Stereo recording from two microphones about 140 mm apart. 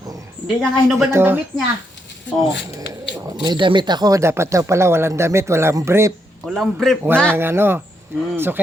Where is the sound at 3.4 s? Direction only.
35° right (ahead or behind).